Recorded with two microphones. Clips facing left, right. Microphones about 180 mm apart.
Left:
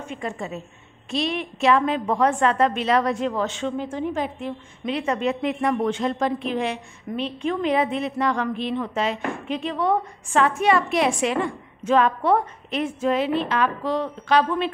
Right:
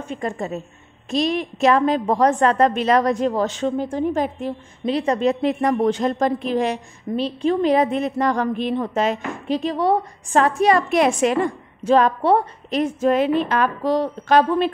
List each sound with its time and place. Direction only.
0.0 s a woman's voice: 40° right (ahead or behind)